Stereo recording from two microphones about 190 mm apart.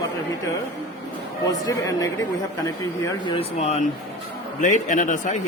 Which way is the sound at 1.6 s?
20° left (ahead or behind).